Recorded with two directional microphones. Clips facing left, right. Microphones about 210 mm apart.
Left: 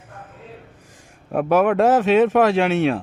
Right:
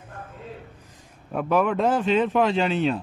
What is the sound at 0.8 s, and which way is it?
Speech, 80° left.